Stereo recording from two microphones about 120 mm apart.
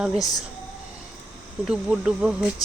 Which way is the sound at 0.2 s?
30° left (ahead or behind).